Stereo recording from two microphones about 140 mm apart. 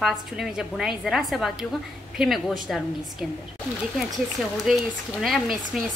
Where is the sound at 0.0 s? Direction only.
Centre (ahead or behind).